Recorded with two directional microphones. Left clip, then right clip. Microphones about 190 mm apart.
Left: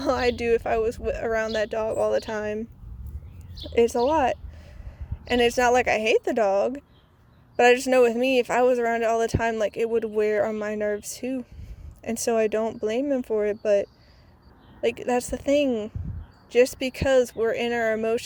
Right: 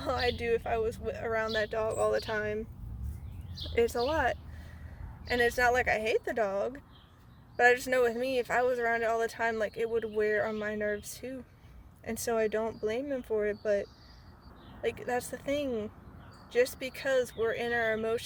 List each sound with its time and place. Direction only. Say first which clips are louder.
0.0 s speech: left 8 dB; 45° left (ahead or behind)
3.6 s speech: left 8 dB; 30° left (ahead or behind)